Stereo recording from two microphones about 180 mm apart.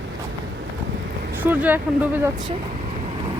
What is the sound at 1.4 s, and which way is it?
Speech, 10° right (ahead or behind).